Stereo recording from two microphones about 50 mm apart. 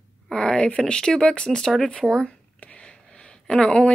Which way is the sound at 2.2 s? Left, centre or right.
Left.